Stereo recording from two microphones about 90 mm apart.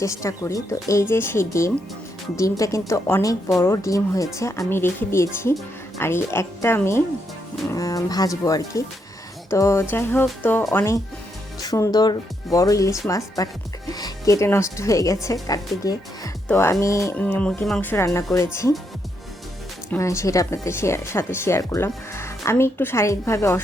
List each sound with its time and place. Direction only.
0.0 s a woman's voice: 35° left (ahead or behind)
7.7 s a woman's voice: 40° left (ahead or behind); by 10.9 s 20° left (ahead or behind)
11.6 s a woman's voice: 45° left (ahead or behind)
17.2 s speech: 20° left (ahead or behind)
18.0 s a woman's voice: 35° left (ahead or behind)
20.0 s speech: 35° left (ahead or behind)